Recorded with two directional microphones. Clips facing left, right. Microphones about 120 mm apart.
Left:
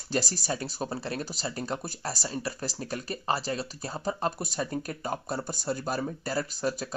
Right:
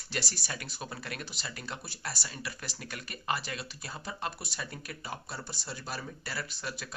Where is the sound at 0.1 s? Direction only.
40° left (ahead or behind).